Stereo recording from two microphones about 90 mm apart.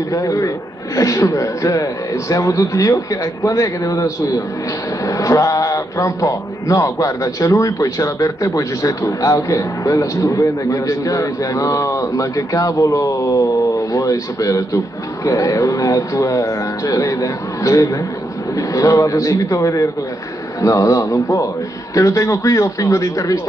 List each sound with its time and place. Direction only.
0.1 s a man's voice: 40° left (ahead or behind)